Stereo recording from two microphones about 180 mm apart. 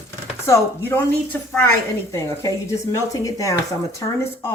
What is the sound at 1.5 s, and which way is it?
A woman's voice, 10° left (ahead or behind).